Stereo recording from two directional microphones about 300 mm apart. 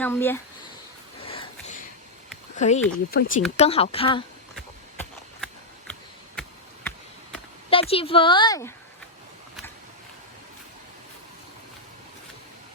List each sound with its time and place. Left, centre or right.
0.0 s speech: centre
1.3 s a sound: centre
2.6 s a woman's voice: left
4.5 s horse: centre
7.7 s speech: centre